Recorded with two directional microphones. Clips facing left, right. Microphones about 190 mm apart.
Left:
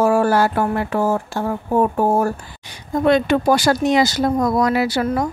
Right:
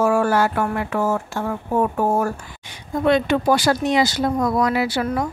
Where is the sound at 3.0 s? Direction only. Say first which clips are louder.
Left 2 dB; 40° left (ahead or behind).